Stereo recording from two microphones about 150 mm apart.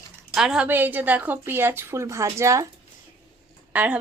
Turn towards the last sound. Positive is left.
turn(degrees=-10)  # may be behind; listen again after turning